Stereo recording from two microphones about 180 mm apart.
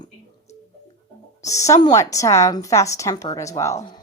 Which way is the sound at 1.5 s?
15° left (ahead or behind).